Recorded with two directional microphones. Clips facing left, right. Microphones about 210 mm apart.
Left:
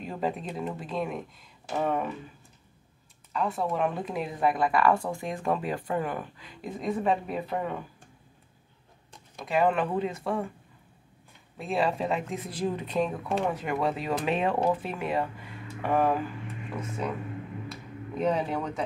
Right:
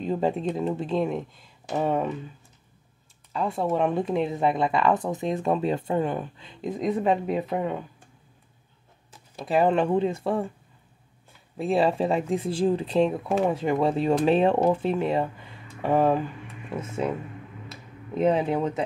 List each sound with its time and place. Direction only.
0.0 s a woman's voice: 25° right (ahead or behind)
3.3 s a woman's voice: 25° right (ahead or behind)
9.4 s a woman's voice: 30° right (ahead or behind)
11.5 s a woman's voice: 30° right (ahead or behind)
18.1 s a woman's voice: 25° right (ahead or behind)